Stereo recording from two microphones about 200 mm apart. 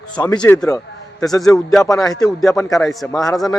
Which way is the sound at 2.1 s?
20° left (ahead or behind).